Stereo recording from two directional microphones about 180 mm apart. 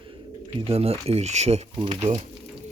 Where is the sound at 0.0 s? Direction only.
30° right (ahead or behind).